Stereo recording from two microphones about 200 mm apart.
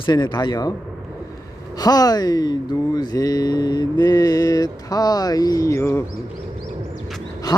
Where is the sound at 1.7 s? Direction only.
20° left (ahead or behind).